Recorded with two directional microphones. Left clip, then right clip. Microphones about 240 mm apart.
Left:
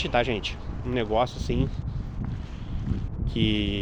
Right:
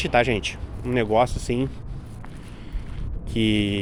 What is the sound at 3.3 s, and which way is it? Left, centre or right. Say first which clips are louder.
Speech: right 4 dB; right.